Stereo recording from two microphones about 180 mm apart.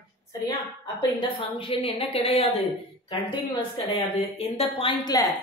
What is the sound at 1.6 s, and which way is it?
A woman's voice, 30° left (ahead or behind).